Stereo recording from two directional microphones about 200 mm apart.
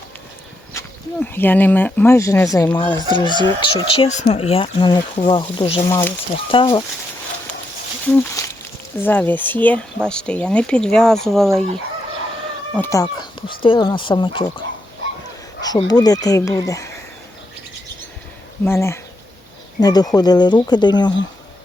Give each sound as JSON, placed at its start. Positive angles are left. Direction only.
{"t": 0.7, "sound": "speech", "side_deg": 10}
{"t": 5.9, "sound": "speech", "side_deg": 10}
{"t": 6.5, "sound": "speech", "side_deg": 25}
{"t": 8.1, "sound": "speech", "side_deg": 15}
{"t": 12.7, "sound": "speech", "side_deg": 15}
{"t": 15.6, "sound": "speech", "side_deg": 20}
{"t": 18.6, "sound": "speech", "side_deg": 10}